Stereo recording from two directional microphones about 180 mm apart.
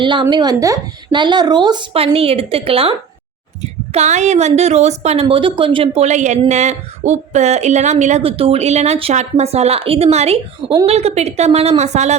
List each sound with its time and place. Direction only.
0.0 s speech: 25° right (ahead or behind)
3.9 s speech: 40° right (ahead or behind)
5.2 s speech: 25° right (ahead or behind)